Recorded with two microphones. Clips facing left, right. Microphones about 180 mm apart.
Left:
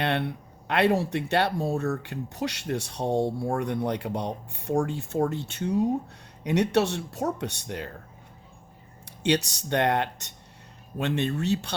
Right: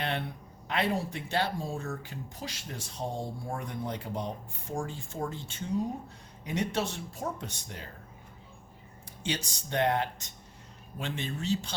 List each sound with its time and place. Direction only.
0.0 s speech: 65° left (ahead or behind)
9.0 s speech: 70° left (ahead or behind)